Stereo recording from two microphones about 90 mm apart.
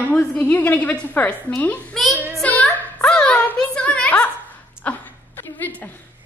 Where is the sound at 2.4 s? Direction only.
15° left (ahead or behind).